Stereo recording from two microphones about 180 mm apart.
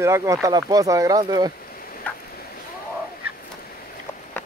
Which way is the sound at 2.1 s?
10° left (ahead or behind).